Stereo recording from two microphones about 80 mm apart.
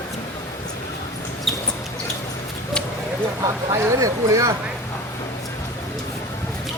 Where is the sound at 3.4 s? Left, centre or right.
Right.